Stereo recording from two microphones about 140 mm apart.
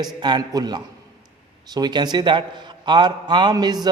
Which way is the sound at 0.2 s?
30° right (ahead or behind).